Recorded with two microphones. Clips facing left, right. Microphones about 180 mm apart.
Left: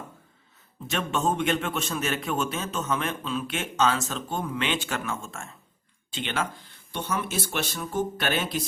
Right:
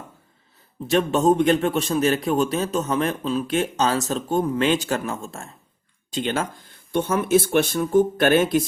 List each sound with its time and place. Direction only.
0.9 s a man's voice: 35° right (ahead or behind)